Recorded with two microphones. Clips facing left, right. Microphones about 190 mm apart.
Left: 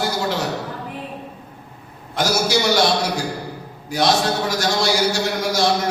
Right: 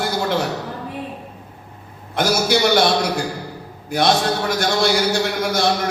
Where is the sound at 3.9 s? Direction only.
55° right (ahead or behind).